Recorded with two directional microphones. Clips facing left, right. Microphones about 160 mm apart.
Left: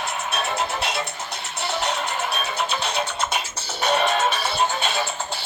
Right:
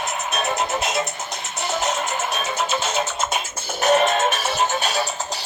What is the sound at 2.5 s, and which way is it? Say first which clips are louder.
Music: right 4 dB; 45° right (ahead or behind).